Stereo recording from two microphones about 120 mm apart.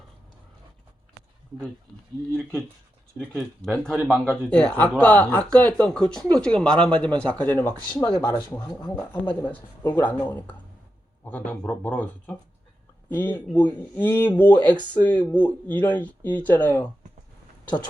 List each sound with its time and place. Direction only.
2.3 s speech: centre (ahead or behind)
7.9 s speech: 40° left (ahead or behind)
9.0 s speech: 15° left (ahead or behind)